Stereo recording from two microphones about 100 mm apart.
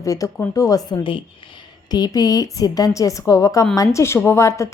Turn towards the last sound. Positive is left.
turn(degrees=30)  # may be behind; listen again after turning